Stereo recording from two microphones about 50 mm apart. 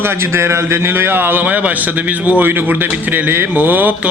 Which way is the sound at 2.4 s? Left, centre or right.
Right.